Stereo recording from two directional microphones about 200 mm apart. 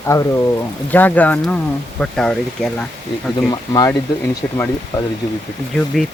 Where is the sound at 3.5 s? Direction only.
20° left (ahead or behind).